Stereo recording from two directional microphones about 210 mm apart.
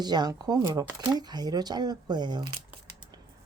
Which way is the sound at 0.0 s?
20° right (ahead or behind).